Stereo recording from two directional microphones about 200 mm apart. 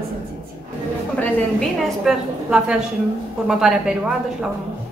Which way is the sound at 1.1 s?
5° left (ahead or behind).